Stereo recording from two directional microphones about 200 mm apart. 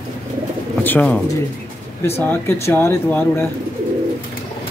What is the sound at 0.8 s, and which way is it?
Speech, 10° left (ahead or behind).